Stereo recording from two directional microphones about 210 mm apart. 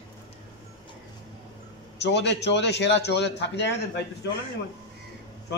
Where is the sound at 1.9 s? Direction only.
55° left (ahead or behind).